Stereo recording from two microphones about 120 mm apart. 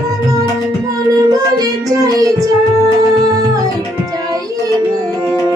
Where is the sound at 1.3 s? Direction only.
30° right (ahead or behind).